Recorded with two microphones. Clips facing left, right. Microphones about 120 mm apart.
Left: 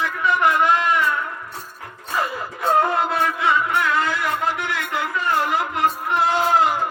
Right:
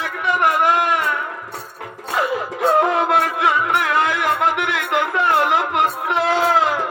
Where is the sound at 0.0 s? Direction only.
60° right (ahead or behind).